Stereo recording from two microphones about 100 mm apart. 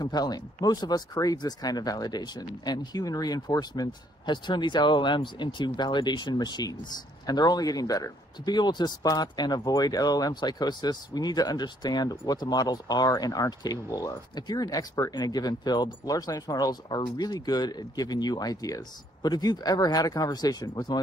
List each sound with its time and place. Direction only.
0.0 s speech: 40° left (ahead or behind)